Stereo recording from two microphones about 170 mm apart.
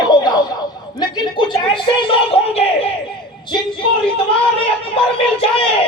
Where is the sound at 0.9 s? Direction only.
25° left (ahead or behind).